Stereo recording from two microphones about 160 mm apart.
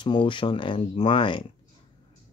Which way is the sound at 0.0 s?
30° left (ahead or behind).